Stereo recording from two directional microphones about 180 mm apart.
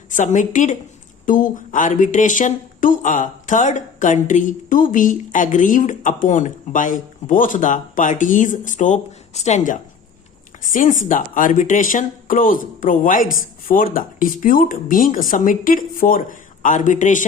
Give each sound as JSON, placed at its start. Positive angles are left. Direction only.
{"t": 0.1, "sound": "speech", "side_deg": 45}